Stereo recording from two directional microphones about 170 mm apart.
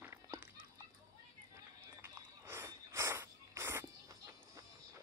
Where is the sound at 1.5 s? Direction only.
20° right (ahead or behind).